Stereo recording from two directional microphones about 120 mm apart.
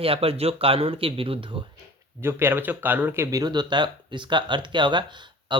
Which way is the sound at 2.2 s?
20° right (ahead or behind).